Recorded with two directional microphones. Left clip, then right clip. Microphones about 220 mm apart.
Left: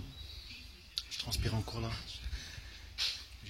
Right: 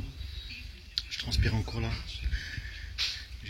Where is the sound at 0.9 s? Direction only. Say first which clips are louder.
Right 5 dB; 10° left (ahead or behind).